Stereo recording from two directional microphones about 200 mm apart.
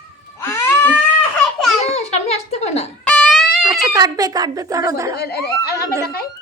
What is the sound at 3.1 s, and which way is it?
Guitar, 5° left (ahead or behind).